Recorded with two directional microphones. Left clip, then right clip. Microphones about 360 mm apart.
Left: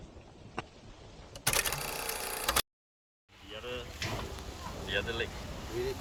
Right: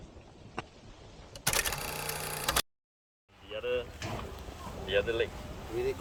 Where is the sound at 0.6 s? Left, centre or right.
Centre.